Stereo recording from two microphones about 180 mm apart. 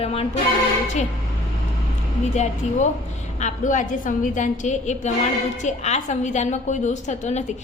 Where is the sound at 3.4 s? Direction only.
40° left (ahead or behind).